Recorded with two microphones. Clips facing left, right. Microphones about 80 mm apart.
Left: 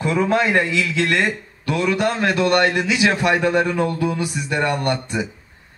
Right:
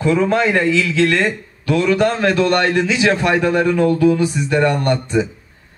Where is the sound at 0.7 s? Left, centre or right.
Left.